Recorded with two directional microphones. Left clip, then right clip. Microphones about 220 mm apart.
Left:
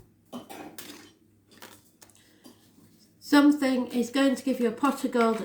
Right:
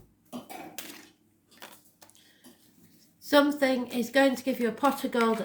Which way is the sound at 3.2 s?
35° right (ahead or behind).